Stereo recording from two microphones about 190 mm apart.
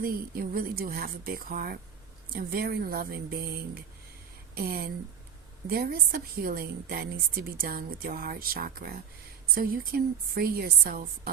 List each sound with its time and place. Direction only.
0.0 s a woman's voice: 50° right (ahead or behind)
4.5 s a woman's voice: 50° right (ahead or behind)